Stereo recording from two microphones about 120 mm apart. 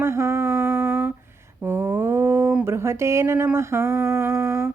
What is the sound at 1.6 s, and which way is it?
Humming, 20° right (ahead or behind).